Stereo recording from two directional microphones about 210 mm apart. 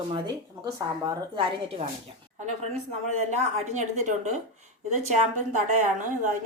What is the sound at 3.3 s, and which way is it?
Speech, 35° right (ahead or behind).